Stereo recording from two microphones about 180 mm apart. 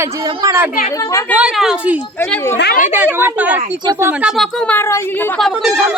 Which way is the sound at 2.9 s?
10° right (ahead or behind).